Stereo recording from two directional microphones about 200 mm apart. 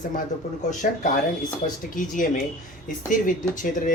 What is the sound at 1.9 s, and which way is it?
Speech, 40° left (ahead or behind).